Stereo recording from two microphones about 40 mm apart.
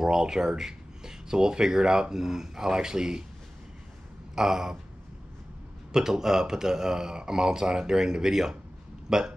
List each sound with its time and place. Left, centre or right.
0.0 s speech: centre
4.4 s speech: centre
5.9 s speech: centre